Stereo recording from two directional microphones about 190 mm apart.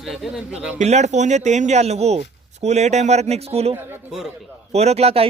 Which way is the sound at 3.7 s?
5° right (ahead or behind).